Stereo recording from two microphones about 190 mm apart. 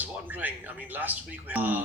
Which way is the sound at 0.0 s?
10° right (ahead or behind).